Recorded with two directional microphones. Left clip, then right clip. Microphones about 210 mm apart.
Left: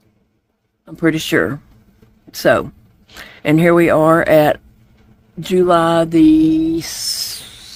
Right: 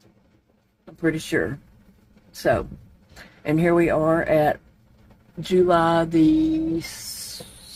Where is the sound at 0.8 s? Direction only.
45° left (ahead or behind).